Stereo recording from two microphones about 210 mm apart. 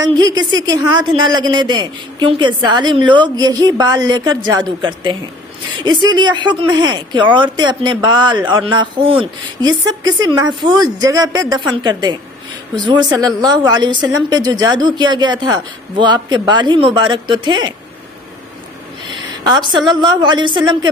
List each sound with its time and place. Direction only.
0.0 s a woman's voice: 20° right (ahead or behind)
19.1 s a woman's voice: 20° right (ahead or behind)